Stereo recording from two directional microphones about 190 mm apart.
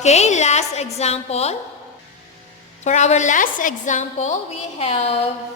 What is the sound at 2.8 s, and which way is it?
A woman's voice, 40° left (ahead or behind).